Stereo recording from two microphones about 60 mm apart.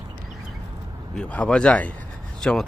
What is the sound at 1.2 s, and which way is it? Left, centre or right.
Speech, centre.